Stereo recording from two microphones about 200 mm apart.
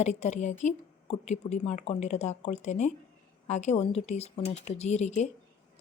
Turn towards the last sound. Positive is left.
turn(degrees=35)  # may be behind; listen again after turning